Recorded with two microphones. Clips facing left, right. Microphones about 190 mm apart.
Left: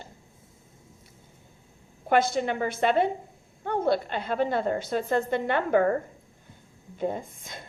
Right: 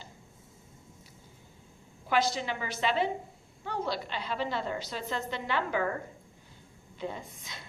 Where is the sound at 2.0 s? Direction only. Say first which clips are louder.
Left 6 dB; 50° left (ahead or behind).